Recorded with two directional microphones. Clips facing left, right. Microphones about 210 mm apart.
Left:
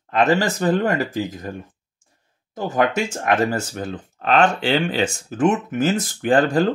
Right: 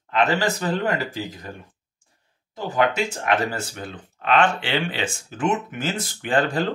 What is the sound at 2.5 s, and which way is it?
Speech, 45° left (ahead or behind).